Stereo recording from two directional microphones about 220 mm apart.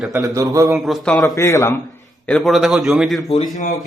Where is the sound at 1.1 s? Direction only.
15° left (ahead or behind).